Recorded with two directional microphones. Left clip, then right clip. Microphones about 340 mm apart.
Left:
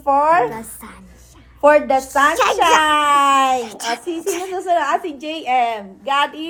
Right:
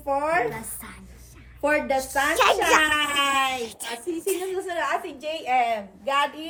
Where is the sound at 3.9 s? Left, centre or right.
Centre.